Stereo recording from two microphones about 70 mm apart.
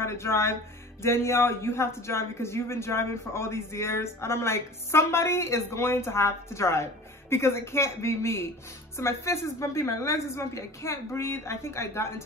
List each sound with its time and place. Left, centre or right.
0.0 s a man's voice: left